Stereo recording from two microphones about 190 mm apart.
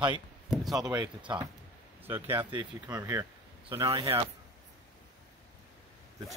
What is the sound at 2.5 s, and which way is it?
Speech, 20° right (ahead or behind).